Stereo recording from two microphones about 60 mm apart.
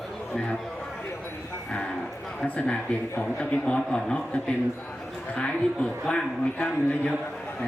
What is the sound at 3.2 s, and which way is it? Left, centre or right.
A man's voice, centre.